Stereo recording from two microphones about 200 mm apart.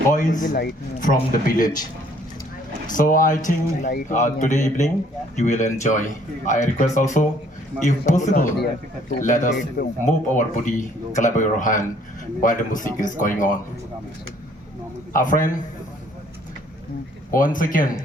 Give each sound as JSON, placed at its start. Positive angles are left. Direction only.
{"t": 0.1, "sound": "speech", "side_deg": 40}
{"t": 2.9, "sound": "a man's voice", "side_deg": 40}
{"t": 15.1, "sound": "a man's voice", "side_deg": 40}
{"t": 17.3, "sound": "speech", "side_deg": 45}